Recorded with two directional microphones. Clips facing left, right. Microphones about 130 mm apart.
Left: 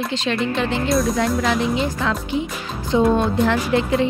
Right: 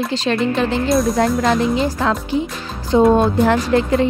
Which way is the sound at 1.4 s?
40° right (ahead or behind).